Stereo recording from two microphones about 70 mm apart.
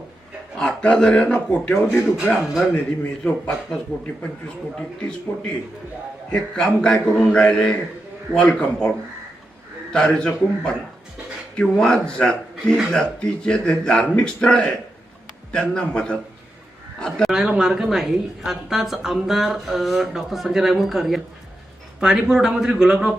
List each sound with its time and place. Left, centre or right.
0.5 s speech: centre
2.0 s a woman's voice: centre
5.3 s a man's voice: left
6.3 s speech: centre
9.9 s speech: centre
17.6 s a woman's voice: centre